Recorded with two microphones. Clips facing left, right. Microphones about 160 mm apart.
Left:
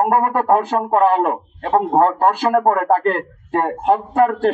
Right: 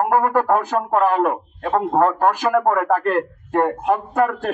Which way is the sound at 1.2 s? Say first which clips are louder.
Left 1 dB; 25° left (ahead or behind).